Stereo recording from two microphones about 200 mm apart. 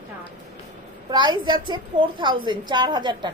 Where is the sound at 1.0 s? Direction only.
25° right (ahead or behind).